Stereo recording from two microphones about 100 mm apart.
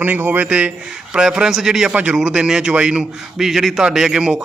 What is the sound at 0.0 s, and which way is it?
Speech, 20° right (ahead or behind).